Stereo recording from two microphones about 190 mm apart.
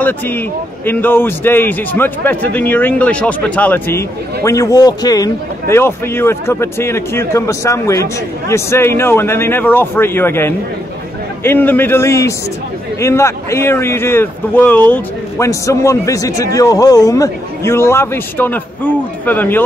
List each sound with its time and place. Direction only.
0.8 s a man's voice: 10° left (ahead or behind)